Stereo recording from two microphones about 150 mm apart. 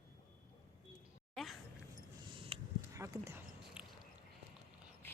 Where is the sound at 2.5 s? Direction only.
35° right (ahead or behind).